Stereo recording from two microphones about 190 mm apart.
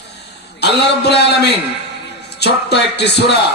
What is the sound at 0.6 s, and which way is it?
A man's voice, 60° left (ahead or behind).